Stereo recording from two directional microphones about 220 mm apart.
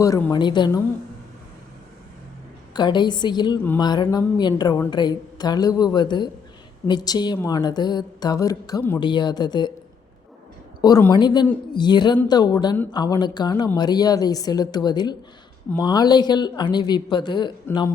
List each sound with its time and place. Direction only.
0.0 s a woman's voice: 15° left (ahead or behind)
2.7 s a woman's voice: 20° left (ahead or behind)
10.8 s a woman's voice: 15° left (ahead or behind)